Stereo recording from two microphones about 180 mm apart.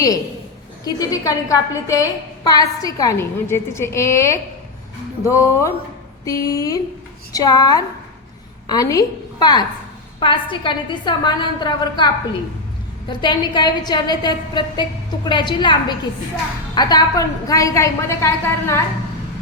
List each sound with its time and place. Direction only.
0.9 s a woman's voice: 20° left (ahead or behind)